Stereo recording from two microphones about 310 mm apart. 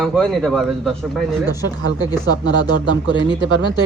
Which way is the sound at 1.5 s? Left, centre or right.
Centre.